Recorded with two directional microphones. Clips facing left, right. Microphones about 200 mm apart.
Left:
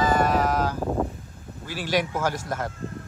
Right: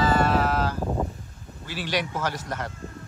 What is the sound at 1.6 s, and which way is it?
Speech, 45° left (ahead or behind).